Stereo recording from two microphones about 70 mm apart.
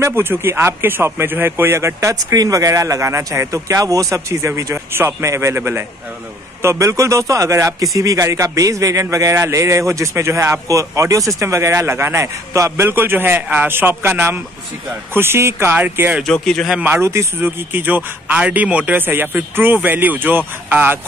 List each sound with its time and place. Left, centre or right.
0.0 s a man's voice: right
2.3 s a man's voice: right
5.6 s a man's voice: right
6.6 s a man's voice: right
16.3 s speech: centre
16.8 s a man's voice: right
17.4 s a man's voice: right